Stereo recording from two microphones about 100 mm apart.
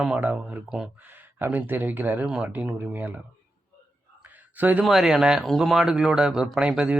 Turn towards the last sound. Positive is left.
turn(degrees=-10)  # may be behind; listen again after turning